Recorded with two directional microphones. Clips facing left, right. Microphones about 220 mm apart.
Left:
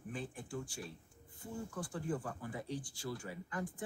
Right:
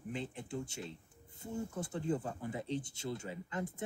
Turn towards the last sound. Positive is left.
turn(degrees=-25)  # may be behind; listen again after turning